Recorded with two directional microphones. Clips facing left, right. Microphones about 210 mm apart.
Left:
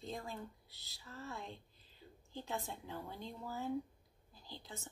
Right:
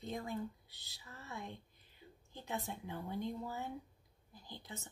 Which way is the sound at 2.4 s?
20° right (ahead or behind).